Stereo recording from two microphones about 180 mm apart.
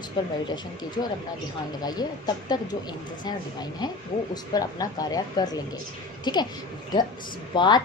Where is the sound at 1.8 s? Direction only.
20° left (ahead or behind).